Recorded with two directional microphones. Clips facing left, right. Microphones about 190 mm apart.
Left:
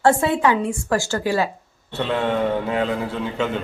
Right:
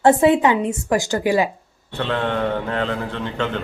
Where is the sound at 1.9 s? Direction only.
5° left (ahead or behind).